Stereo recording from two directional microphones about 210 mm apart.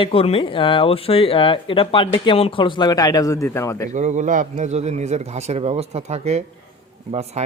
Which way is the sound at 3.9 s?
35° right (ahead or behind).